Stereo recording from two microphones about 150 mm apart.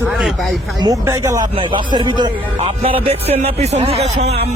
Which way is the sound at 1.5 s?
35° right (ahead or behind).